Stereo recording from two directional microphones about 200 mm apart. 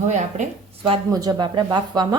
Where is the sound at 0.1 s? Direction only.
30° right (ahead or behind).